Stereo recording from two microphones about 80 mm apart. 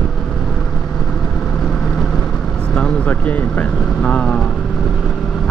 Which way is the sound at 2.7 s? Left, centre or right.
Centre.